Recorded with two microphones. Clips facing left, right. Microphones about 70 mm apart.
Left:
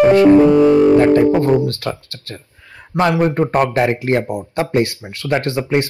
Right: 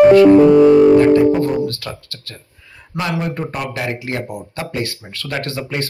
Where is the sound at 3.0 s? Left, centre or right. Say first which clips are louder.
Left 7 dB; left.